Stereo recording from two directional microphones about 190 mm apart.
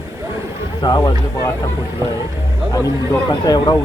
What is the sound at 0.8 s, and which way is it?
Speech, 20° left (ahead or behind).